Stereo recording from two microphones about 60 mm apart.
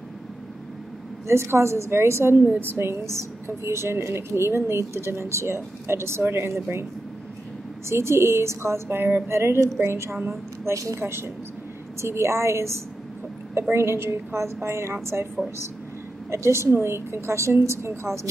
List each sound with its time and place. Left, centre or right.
1.2 s a woman's voice: right
7.9 s a woman's voice: right
10.6 s a woman's voice: right
11.0 s a woman's voice: right
16.3 s a woman's voice: right